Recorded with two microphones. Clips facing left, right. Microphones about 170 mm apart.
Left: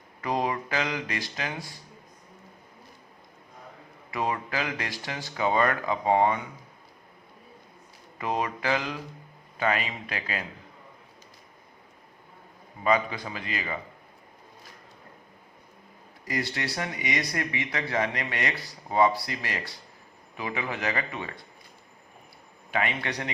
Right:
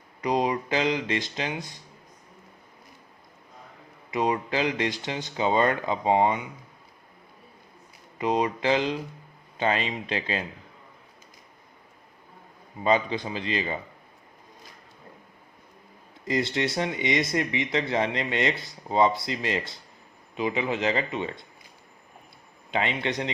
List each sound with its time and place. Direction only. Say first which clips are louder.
0.2 s speech: right 3 dB; 20° right (ahead or behind)
4.1 s speech: right 4 dB; 20° right (ahead or behind)
8.2 s speech: right 4 dB; 20° right (ahead or behind)
12.8 s speech: right 2 dB; 25° right (ahead or behind)
16.2 s speech: right 5 dB; 25° right (ahead or behind)
22.7 s speech: right 2 dB; 25° right (ahead or behind)